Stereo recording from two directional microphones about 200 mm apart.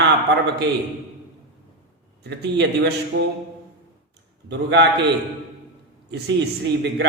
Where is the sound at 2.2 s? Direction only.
55° right (ahead or behind).